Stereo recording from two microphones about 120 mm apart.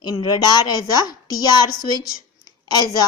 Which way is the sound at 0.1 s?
50° left (ahead or behind).